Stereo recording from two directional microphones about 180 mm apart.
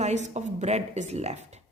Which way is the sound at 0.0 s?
40° right (ahead or behind).